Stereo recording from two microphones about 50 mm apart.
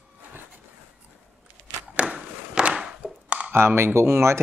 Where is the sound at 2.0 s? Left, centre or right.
Centre.